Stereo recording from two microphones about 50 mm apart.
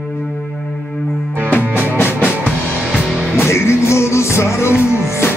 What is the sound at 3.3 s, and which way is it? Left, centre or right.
Music, left.